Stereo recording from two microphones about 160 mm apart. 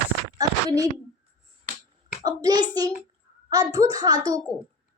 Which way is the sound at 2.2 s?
25° right (ahead or behind).